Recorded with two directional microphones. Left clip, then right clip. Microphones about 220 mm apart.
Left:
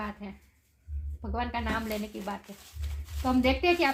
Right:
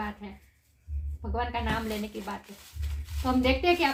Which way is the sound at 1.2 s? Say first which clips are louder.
Right 1 dB; 40° left (ahead or behind).